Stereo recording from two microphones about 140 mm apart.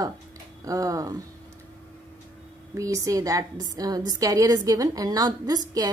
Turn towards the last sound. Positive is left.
turn(degrees=-25)  # may be behind; listen again after turning